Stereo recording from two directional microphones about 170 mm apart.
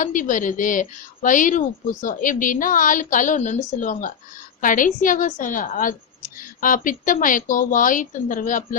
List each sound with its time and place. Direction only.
0.0 s a woman's voice: 50° left (ahead or behind)